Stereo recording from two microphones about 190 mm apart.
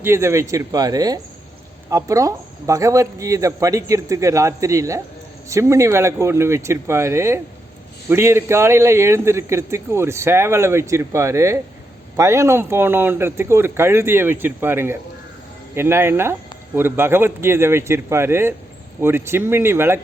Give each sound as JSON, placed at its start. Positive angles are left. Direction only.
{"t": 0.0, "sound": "speech", "side_deg": -15}